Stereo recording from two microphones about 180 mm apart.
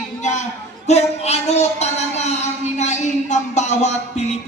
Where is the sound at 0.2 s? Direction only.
40° left (ahead or behind).